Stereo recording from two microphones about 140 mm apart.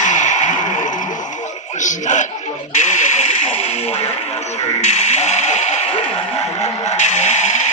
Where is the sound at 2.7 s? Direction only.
60° left (ahead or behind).